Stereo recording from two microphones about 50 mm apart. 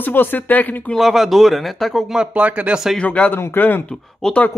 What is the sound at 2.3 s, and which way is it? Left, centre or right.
Speech, right.